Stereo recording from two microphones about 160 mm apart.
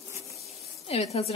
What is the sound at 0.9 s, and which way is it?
Speech, 40° left (ahead or behind).